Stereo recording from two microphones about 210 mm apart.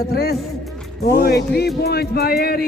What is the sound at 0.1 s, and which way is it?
Speech, 50° left (ahead or behind).